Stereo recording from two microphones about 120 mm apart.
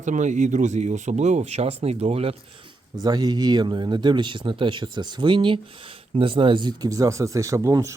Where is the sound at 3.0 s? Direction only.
35° right (ahead or behind).